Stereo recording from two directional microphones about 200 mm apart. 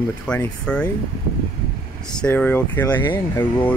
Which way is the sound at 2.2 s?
10° left (ahead or behind).